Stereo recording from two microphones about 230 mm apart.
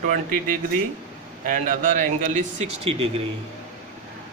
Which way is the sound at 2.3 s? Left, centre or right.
Right.